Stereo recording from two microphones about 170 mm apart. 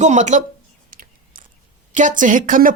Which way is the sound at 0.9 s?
55° right (ahead or behind).